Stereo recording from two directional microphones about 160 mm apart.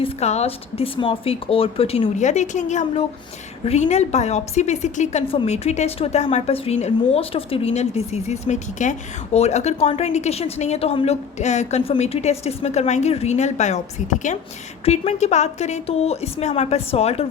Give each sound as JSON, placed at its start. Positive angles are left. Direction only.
{"t": 0.0, "sound": "a woman's voice", "side_deg": 40}